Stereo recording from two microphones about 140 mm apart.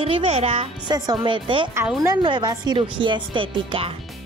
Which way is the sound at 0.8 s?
30° right (ahead or behind).